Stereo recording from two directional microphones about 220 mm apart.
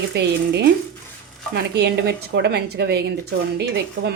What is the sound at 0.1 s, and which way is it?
Speech, 50° right (ahead or behind).